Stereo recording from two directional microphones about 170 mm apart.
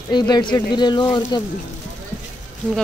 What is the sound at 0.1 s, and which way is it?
Speech, 25° left (ahead or behind).